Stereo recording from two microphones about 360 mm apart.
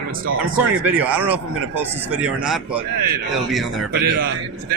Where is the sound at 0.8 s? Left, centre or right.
Centre.